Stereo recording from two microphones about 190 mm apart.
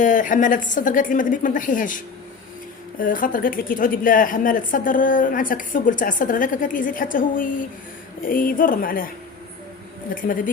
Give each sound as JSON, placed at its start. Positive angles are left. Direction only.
{"t": 0.0, "sound": "a woman's voice", "side_deg": 45}
{"t": 3.0, "sound": "a woman's voice", "side_deg": 45}
{"t": 10.2, "sound": "a woman's voice", "side_deg": 45}